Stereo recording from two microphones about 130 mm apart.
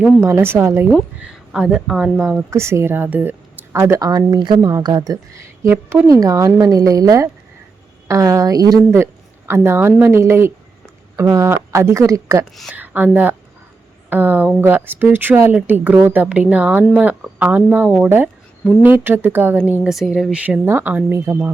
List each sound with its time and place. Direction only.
0.2 s a woman's voice: 20° right (ahead or behind)
1.2 s speech: 5° right (ahead or behind)
2.5 s a woman's voice: 20° right (ahead or behind)